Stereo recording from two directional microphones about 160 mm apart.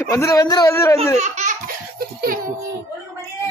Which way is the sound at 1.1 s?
45° right (ahead or behind).